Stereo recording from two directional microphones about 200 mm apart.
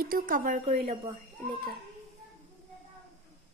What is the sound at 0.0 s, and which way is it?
Speech, 45° right (ahead or behind).